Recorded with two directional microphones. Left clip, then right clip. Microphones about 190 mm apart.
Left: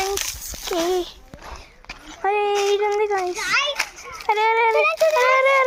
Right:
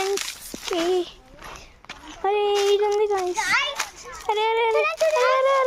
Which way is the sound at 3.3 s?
30° right (ahead or behind).